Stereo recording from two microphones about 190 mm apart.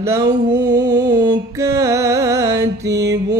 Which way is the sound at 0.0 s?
15° right (ahead or behind).